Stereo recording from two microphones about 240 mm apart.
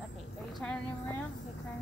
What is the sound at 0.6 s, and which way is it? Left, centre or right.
Speech, centre.